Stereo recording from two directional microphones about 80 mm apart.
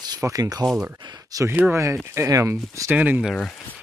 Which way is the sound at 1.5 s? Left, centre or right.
Right.